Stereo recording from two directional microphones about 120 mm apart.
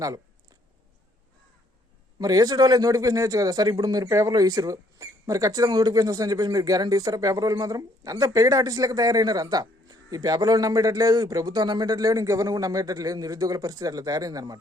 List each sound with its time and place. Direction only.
2.1 s a man's voice: 30° right (ahead or behind)